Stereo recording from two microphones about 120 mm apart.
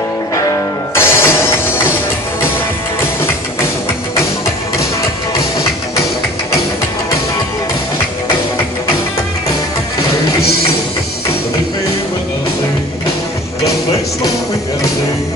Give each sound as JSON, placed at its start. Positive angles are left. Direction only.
{"t": 0.9, "sound": "music", "side_deg": 20}